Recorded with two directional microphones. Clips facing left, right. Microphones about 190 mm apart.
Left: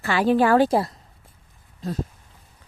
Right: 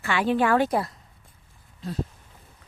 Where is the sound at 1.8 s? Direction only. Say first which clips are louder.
Left 4 dB; 40° left (ahead or behind).